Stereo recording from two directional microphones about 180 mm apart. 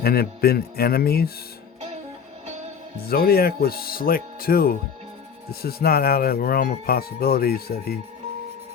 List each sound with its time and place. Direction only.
0.0 s speech: 60° left (ahead or behind)
3.1 s speech: 55° left (ahead or behind)